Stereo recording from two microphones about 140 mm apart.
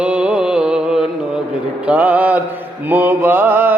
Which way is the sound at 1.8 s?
10° right (ahead or behind).